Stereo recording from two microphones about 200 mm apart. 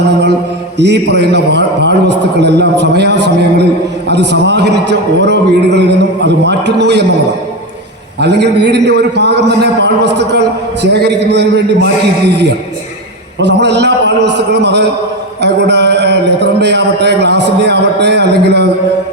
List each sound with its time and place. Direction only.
0.0 s a man's voice: 60° right (ahead or behind)
8.2 s a man's voice: 60° right (ahead or behind)